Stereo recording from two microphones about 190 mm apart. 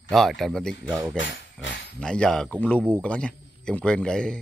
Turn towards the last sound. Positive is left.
turn(degrees=5)  # may be behind; listen again after turning